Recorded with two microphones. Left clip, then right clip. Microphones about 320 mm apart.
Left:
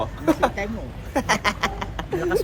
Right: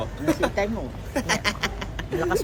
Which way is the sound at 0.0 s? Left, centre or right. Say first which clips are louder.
Left 3 dB; centre.